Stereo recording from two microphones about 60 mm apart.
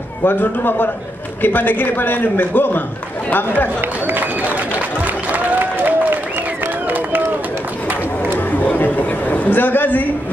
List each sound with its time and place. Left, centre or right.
0.2 s a man's voice: left
4.1 s applause: right
8.5 s a sound: left